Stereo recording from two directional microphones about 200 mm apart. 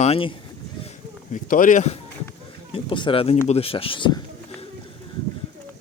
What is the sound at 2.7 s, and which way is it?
Speech, 25° left (ahead or behind).